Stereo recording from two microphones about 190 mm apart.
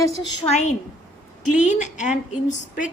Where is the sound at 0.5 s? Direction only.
40° left (ahead or behind).